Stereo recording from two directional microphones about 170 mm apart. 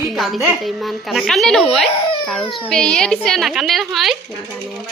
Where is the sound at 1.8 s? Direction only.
30° left (ahead or behind).